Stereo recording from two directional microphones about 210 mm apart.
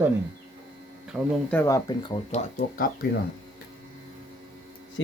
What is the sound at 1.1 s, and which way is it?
Speech, centre (ahead or behind).